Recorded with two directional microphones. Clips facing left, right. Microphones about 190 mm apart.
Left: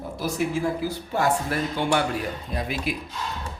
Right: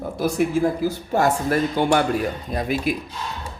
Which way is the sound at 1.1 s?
45° right (ahead or behind).